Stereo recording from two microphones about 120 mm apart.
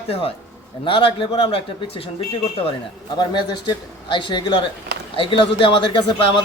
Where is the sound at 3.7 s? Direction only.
45° left (ahead or behind).